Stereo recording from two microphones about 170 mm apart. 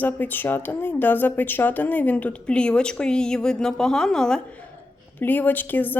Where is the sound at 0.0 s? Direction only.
10° left (ahead or behind).